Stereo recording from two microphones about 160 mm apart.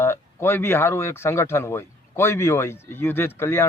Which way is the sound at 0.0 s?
15° left (ahead or behind).